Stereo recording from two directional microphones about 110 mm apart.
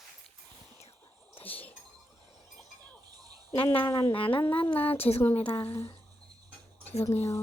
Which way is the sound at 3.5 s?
55° left (ahead or behind).